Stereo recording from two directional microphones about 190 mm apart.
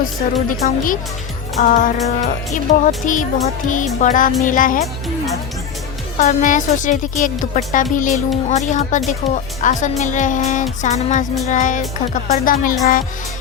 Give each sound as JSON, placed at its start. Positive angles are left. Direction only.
{"t": 0.4, "sound": "a woman's voice", "side_deg": 45}
{"t": 6.1, "sound": "a woman's voice", "side_deg": 45}